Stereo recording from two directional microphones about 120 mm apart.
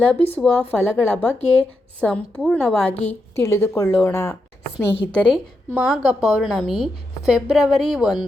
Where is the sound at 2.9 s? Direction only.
60° left (ahead or behind).